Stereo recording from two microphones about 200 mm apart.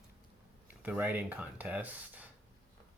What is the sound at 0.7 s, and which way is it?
Speech, 10° right (ahead or behind).